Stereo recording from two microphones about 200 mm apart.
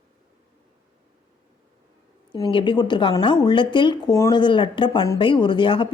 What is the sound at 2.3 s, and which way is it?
A woman's voice, 25° left (ahead or behind).